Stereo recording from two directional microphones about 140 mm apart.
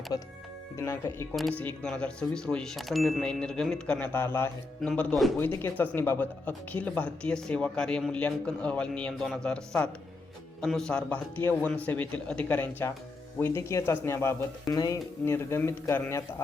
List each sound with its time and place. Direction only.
0.1 s speech: 25° left (ahead or behind)
1.4 s speech: centre (ahead or behind); by 4.5 s 15° left (ahead or behind)
4.8 s speech: 5° left (ahead or behind)
5.6 s speech: 15° left (ahead or behind)